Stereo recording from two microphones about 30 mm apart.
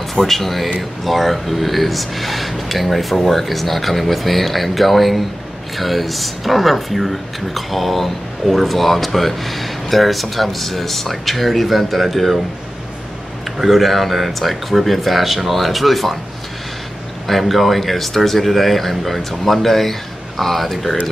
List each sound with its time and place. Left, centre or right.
0.2 s speech: centre
13.6 s speech: centre
17.3 s speech: centre